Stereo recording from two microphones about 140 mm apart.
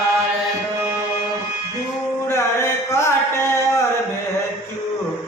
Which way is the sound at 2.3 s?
20° left (ahead or behind).